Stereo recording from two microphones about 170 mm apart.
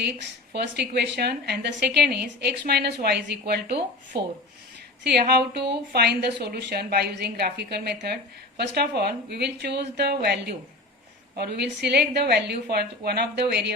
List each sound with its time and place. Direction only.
0.5 s a woman's voice: 80° right
5.0 s a woman's voice: 70° right (ahead or behind)